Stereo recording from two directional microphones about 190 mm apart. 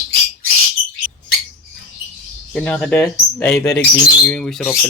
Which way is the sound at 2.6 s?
5° left (ahead or behind).